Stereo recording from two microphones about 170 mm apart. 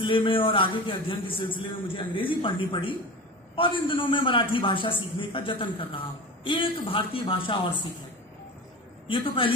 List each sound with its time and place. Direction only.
0.0 s a man's voice: 30° left (ahead or behind)
9.0 s a man's voice: 30° left (ahead or behind)